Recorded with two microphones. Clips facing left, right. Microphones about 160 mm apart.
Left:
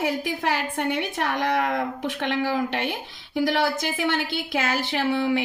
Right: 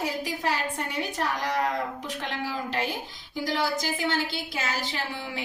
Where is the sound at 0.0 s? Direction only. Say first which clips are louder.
Left 4 dB; 60° left (ahead or behind).